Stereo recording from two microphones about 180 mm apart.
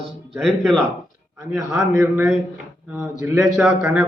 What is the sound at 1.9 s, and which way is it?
Speech, 15° right (ahead or behind).